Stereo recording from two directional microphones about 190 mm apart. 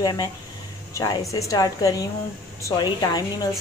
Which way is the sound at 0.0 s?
20° left (ahead or behind).